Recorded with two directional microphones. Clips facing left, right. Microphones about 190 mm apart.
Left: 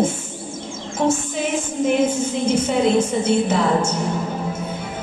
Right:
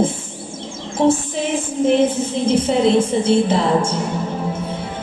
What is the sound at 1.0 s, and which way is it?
Music, 30° right (ahead or behind).